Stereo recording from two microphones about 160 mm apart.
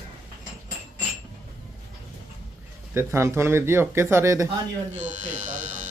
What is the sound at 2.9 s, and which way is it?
Speech, 15° right (ahead or behind).